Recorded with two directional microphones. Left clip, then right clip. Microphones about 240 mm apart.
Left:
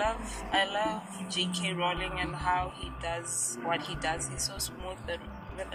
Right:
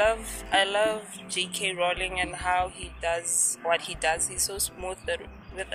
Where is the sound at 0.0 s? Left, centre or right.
Right.